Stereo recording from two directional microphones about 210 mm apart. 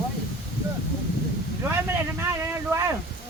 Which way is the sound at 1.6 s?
10° right (ahead or behind).